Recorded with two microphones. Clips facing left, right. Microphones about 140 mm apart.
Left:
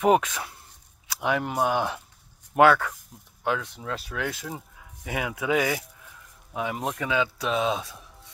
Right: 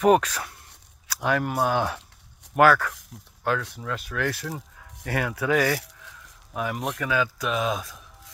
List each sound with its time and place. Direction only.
0.0 s speech: 20° left (ahead or behind)
2.9 s speech: 90° right
3.7 s speech: 30° left (ahead or behind)
4.1 s speech: 20° left (ahead or behind)